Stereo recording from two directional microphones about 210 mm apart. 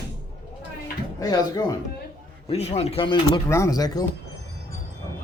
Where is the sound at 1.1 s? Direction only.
15° left (ahead or behind).